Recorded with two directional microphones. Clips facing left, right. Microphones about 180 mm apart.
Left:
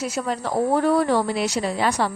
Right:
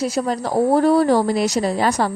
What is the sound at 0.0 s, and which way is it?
A woman's voice, 40° right (ahead or behind).